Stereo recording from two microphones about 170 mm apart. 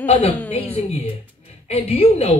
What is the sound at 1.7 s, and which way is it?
Speech, 40° left (ahead or behind).